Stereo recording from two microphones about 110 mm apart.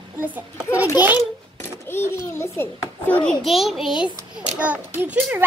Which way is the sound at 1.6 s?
20° left (ahead or behind).